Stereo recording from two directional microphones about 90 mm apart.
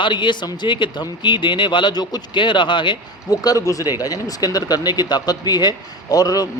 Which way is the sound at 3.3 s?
40° left (ahead or behind).